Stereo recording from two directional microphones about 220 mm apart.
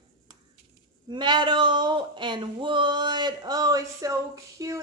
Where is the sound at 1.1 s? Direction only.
20° right (ahead or behind).